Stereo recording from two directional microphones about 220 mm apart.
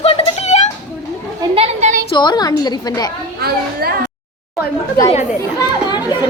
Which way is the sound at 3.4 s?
45° right (ahead or behind).